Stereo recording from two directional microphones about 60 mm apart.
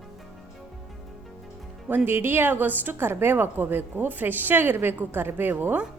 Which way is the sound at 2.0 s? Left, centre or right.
Right.